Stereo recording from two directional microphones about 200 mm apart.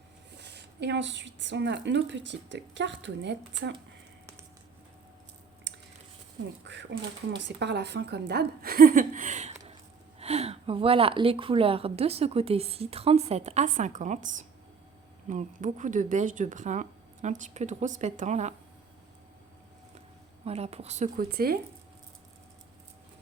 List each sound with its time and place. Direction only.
0.3 s a woman's voice: 60° right (ahead or behind)
5.7 s chewing: 65° right (ahead or behind)
6.7 s a woman's voice: 60° right (ahead or behind); by 18.5 s 35° right (ahead or behind)
20.4 s speech: 30° right (ahead or behind)
21.3 s a woman's voice: 50° right (ahead or behind)